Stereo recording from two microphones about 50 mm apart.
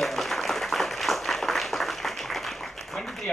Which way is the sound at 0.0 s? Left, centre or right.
Centre.